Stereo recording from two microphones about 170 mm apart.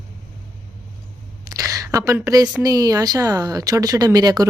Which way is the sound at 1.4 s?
20° right (ahead or behind).